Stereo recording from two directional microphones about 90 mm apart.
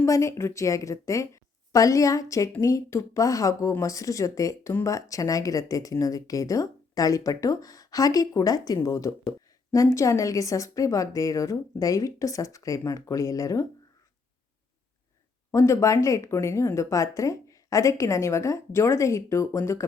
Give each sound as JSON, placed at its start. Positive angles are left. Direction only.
{"t": 0.0, "sound": "speech", "side_deg": 35}
{"t": 15.5, "sound": "speech", "side_deg": 35}